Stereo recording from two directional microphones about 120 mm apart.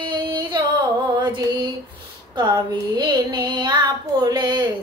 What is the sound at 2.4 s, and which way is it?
Child singing, 40° right (ahead or behind).